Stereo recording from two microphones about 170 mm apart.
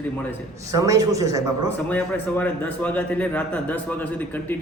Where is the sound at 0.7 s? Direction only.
20° right (ahead or behind).